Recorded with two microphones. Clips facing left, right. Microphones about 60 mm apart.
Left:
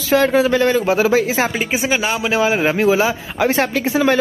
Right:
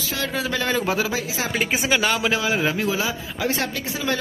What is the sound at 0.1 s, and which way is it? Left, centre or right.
Speech, left.